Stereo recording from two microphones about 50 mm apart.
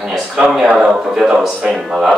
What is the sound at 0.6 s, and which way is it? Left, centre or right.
Speech, right.